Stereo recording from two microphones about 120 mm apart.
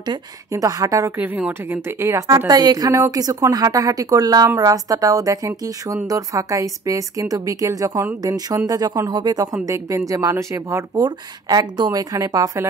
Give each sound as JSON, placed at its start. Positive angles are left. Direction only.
{"t": 0.0, "sound": "a woman's voice", "side_deg": -30}
{"t": 1.1, "sound": "a woman's voice", "side_deg": -15}